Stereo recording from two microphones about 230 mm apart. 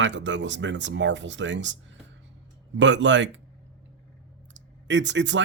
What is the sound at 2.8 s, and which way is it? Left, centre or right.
Speech, right.